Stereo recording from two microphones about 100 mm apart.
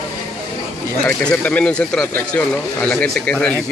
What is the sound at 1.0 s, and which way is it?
Speech, 10° left (ahead or behind).